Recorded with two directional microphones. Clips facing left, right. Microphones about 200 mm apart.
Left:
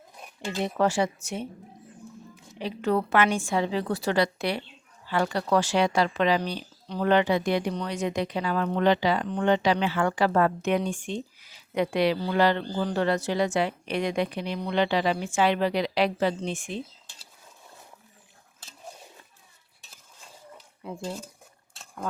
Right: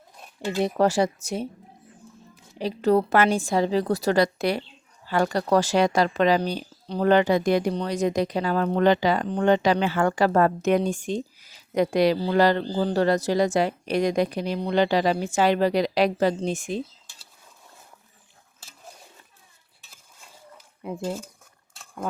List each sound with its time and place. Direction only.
0.6 s speech: 40° right (ahead or behind)